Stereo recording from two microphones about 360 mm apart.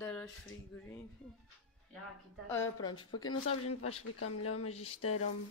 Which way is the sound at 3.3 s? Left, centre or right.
Left.